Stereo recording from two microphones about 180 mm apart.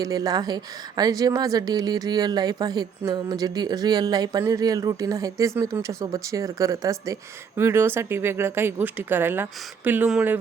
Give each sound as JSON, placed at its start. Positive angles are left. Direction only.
{"t": 0.0, "sound": "a woman's voice", "side_deg": -20}